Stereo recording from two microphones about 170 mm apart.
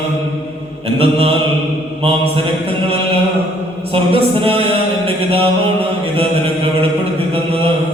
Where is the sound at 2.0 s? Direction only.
35° right (ahead or behind).